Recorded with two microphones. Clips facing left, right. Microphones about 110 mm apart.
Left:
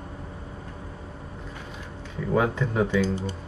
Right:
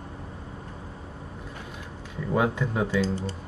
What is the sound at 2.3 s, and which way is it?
Speech, 5° right (ahead or behind).